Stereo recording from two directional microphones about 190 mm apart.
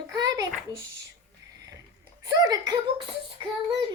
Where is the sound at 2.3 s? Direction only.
20° right (ahead or behind).